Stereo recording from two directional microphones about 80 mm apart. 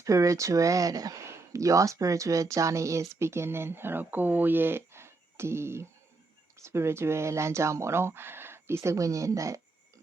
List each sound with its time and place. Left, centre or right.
0.0 s speech: right